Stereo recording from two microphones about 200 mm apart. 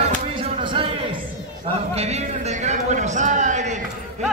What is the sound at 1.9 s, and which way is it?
A man's voice, 30° right (ahead or behind).